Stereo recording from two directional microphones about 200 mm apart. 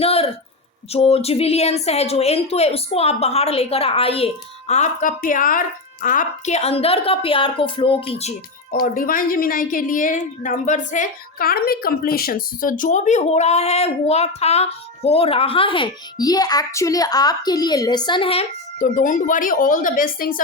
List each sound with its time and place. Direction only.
0.0 s a sound: 30° left (ahead or behind)
0.9 s a woman's voice: 30° left (ahead or behind)
8.7 s a woman's voice: 45° left (ahead or behind); by 18.4 s 25° left (ahead or behind)
18.8 s a woman's voice: 40° left (ahead or behind)